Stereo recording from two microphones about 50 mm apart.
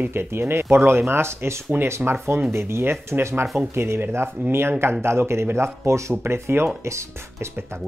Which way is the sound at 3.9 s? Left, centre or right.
Right.